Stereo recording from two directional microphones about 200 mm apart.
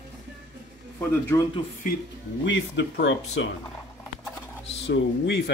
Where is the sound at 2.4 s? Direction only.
65° left (ahead or behind).